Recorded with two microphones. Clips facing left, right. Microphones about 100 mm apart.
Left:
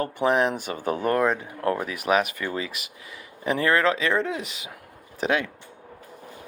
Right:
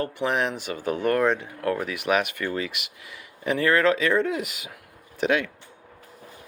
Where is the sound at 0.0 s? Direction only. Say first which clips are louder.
Left 3 dB; 35° left (ahead or behind).